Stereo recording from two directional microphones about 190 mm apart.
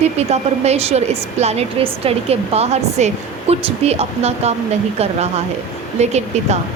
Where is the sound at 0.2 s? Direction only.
35° right (ahead or behind).